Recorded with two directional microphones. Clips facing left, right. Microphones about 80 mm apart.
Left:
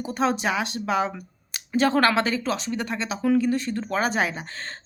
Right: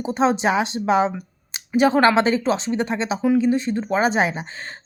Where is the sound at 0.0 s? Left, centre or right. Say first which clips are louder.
Right 5 dB; right.